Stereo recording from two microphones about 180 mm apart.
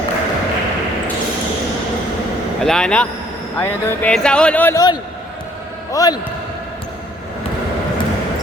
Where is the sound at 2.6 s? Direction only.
5° left (ahead or behind); by 6.1 s 20° left (ahead or behind).